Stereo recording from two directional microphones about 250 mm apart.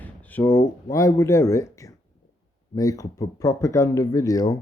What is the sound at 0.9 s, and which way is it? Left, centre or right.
Speech, centre.